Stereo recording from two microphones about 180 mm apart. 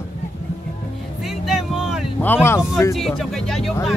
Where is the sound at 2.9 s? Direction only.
Centre (ahead or behind).